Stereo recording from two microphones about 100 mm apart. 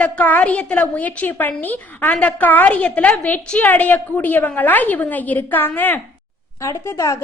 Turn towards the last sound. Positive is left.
turn(degrees=30)  # may be behind; listen again after turning